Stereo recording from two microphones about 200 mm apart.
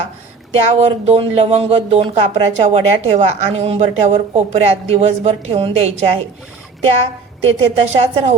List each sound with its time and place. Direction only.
0.5 s speech: 30° right (ahead or behind)
7.4 s a woman's voice: 30° right (ahead or behind)